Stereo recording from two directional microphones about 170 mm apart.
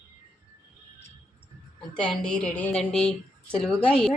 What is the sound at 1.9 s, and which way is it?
A woman's voice, 5° left (ahead or behind).